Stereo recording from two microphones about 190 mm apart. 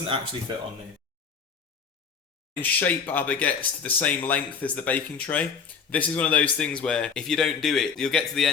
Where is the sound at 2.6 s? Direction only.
10° left (ahead or behind).